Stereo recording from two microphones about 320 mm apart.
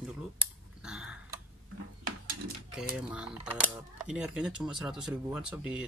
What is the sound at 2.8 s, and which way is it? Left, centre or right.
Speech, centre.